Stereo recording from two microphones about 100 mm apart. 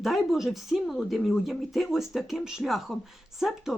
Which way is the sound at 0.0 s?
Centre (ahead or behind).